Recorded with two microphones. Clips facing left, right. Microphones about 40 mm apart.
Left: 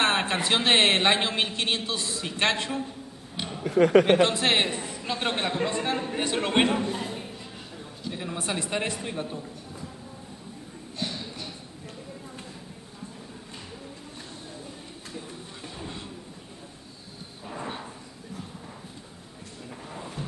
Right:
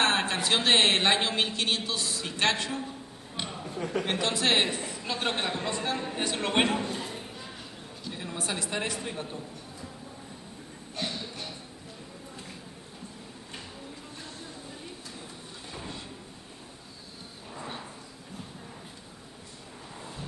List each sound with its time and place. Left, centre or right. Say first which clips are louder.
0.0 s a woman's voice: left 2 dB; centre
3.6 s speech: left 15 dB; left
4.0 s speech: left 7 dB; left
4.6 s a man's voice: left 2 dB; centre
6.5 s speech: left 3 dB; centre
8.0 s a woman's voice: left 4 dB; centre
8.4 s speech: left 2 dB; left
9.0 s speech: left 3 dB; centre
11.0 s a sound: left 1 dB; right